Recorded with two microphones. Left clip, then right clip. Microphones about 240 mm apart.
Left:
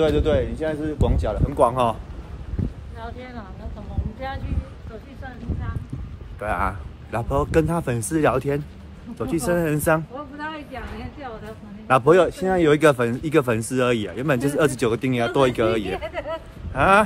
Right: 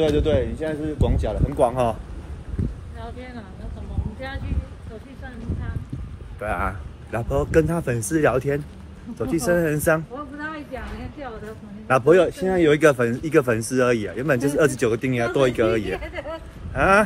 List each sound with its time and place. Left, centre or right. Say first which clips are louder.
0.0 s speech: even; left
3.0 s speech: left 1 dB; left
6.4 s speech: left 1 dB; centre
11.9 s speech: even; centre